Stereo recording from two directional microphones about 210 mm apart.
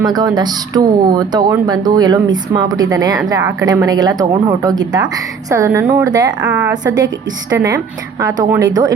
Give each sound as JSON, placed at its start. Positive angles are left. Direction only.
{"t": 0.0, "sound": "speech", "side_deg": -20}
{"t": 6.5, "sound": "speech", "side_deg": -5}
{"t": 6.8, "sound": "a woman's voice", "side_deg": -20}